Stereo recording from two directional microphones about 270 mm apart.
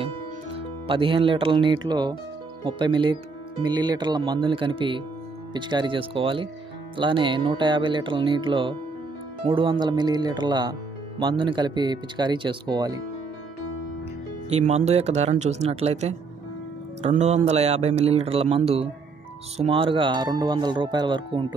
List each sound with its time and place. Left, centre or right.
0.6 s speech: centre
14.9 s speech: right